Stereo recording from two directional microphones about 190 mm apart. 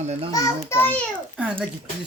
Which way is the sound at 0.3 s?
15° left (ahead or behind).